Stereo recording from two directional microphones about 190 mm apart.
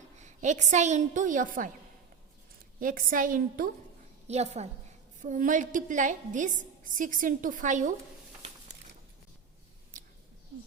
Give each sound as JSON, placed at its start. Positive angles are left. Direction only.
{"t": 0.2, "sound": "a woman's voice", "side_deg": -40}
{"t": 2.8, "sound": "a woman's voice", "side_deg": -45}
{"t": 4.3, "sound": "a woman's voice", "side_deg": -35}
{"t": 9.9, "sound": "a sound", "side_deg": -45}